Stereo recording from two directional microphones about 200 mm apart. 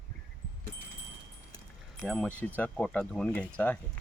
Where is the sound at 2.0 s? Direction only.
5° left (ahead or behind).